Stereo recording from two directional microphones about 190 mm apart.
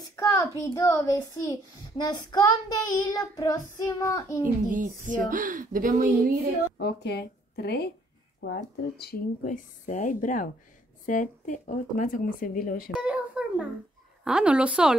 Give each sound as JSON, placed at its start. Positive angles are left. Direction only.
{"t": 0.1, "sound": "a child's voice", "side_deg": 15}
{"t": 4.6, "sound": "a woman's voice", "side_deg": -45}
{"t": 6.8, "sound": "speech", "side_deg": 60}
{"t": 9.4, "sound": "speech", "side_deg": 45}
{"t": 12.9, "sound": "a sound", "side_deg": -5}
{"t": 14.2, "sound": "a woman's voice", "side_deg": -5}